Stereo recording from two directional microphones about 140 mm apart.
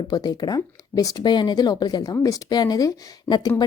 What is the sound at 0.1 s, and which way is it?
A woman's voice, 30° left (ahead or behind).